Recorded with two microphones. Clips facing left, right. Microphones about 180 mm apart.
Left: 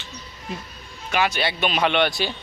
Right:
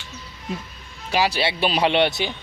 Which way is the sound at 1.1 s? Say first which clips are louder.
Right 1 dB; 35° right (ahead or behind).